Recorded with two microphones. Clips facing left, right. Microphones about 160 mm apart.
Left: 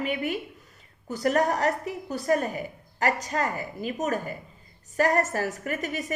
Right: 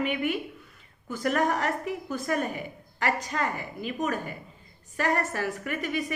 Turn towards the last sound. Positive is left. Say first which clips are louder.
# even
turn(degrees=45)  # may be behind; listen again after turning